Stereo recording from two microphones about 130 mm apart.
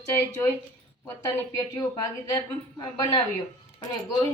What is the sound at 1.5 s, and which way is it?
A woman's voice, 25° left (ahead or behind).